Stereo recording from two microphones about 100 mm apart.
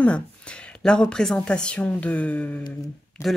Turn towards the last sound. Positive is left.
turn(degrees=30)  # may be behind; listen again after turning